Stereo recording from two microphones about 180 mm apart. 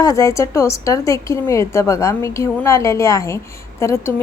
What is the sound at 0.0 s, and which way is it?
A woman's voice, 20° left (ahead or behind).